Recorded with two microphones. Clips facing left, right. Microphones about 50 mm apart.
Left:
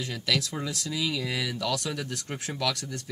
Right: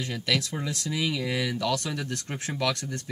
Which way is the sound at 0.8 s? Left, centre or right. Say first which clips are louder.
Right 3 dB; right.